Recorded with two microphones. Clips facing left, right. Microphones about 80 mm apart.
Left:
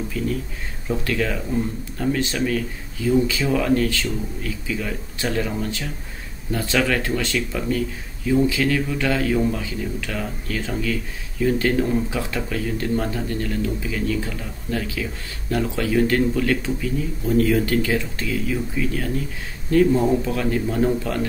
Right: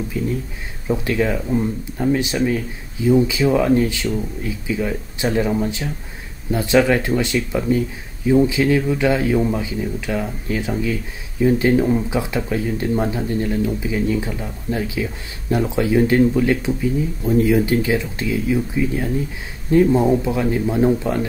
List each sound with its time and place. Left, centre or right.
0.2 s speech: right